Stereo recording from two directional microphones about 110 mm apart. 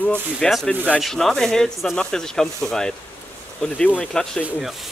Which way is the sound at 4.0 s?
10° left (ahead or behind).